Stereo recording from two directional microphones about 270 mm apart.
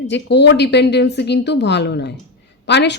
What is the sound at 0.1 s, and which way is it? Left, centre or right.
Speech, left.